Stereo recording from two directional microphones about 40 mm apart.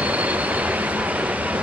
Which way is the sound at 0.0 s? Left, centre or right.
Right.